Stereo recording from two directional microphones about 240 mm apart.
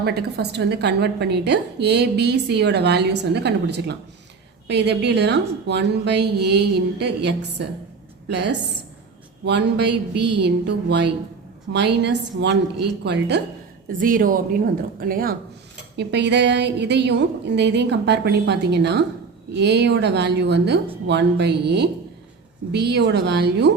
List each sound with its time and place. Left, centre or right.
0.0 s a woman's voice: right